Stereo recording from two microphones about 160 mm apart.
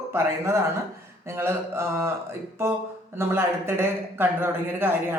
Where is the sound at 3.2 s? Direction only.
15° right (ahead or behind).